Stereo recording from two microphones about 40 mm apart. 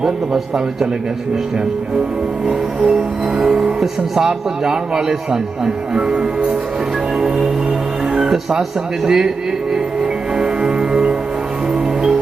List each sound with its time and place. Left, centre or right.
0.0 s speech: centre
2.5 s speech: right
3.3 s music: centre
3.8 s speech: centre
4.3 s speech: centre
8.2 s speech: centre
9.7 s music: centre